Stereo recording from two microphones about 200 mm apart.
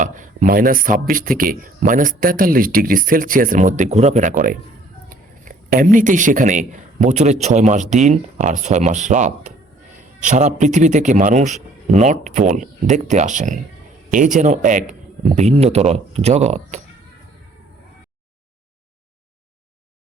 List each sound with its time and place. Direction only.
0.0 s speech: 40° right (ahead or behind)